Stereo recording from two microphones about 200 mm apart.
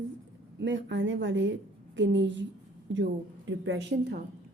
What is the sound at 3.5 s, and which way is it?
Speech, 55° right (ahead or behind).